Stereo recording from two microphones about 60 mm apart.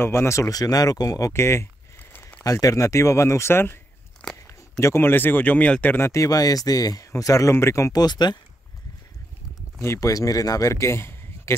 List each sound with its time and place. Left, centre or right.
0.0 s speech: left
0.5 s speech: left
1.3 s speech: left
2.4 s speech: left
4.2 s a sound: left
4.7 s speech: left
5.0 s speech: left
5.9 s speech: left
7.1 s speech: left
7.5 s speech: left
9.9 s speech: left
10.7 s a sound: left